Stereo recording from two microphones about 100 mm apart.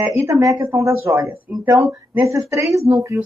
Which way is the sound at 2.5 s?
30° right (ahead or behind).